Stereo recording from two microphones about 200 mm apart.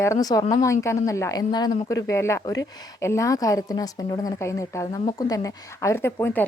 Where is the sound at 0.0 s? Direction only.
15° left (ahead or behind).